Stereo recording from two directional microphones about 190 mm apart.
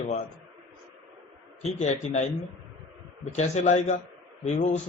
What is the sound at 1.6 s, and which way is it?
Speech, 35° left (ahead or behind).